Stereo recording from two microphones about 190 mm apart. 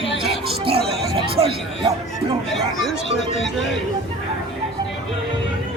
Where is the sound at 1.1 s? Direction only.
30° right (ahead or behind).